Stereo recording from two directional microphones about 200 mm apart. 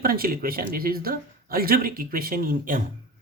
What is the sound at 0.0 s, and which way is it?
Speech, 45° right (ahead or behind).